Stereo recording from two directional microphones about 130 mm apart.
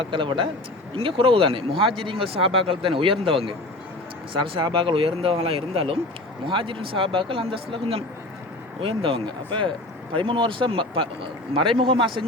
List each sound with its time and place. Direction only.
0.0 s a man's voice: 40° right (ahead or behind)